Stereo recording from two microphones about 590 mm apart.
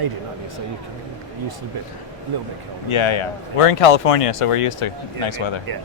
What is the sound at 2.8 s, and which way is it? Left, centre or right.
Speech, left.